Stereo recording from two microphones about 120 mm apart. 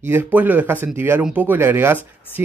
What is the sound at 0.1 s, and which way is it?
Speech, 15° right (ahead or behind).